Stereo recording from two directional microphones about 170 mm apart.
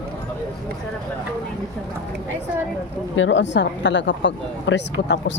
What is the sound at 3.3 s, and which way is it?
Speech, 90° left.